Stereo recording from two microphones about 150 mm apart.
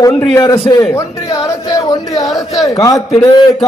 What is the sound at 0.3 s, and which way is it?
Speech, 25° left (ahead or behind).